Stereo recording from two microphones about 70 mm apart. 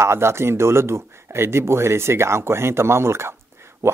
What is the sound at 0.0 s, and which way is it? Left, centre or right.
Speech, right.